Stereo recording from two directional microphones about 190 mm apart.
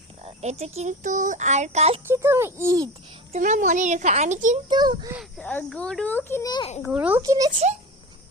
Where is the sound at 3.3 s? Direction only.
40° right (ahead or behind).